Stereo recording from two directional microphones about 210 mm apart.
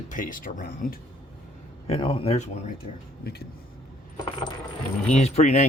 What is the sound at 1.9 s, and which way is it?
Speech, 25° left (ahead or behind).